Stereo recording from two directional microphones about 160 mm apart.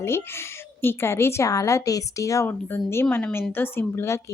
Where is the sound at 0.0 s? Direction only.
15° left (ahead or behind).